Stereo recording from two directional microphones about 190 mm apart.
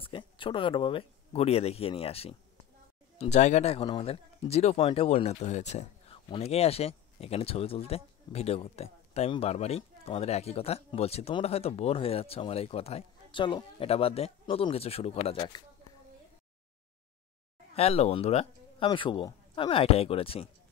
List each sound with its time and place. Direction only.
0.0 s speech: 25° left (ahead or behind)
17.7 s speech: 35° left (ahead or behind)